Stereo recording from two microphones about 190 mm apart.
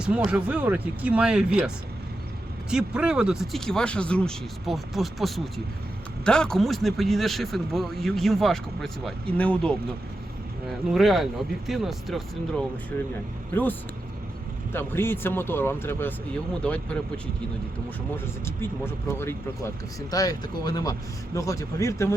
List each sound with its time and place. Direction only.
0.0 s speech: 5° right (ahead or behind)
18.4 s speech: 15° left (ahead or behind)